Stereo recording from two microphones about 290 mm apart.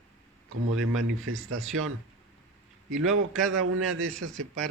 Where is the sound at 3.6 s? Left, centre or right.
Right.